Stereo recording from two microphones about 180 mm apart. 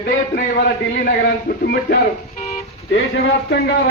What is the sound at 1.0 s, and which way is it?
Speech, 55° left (ahead or behind).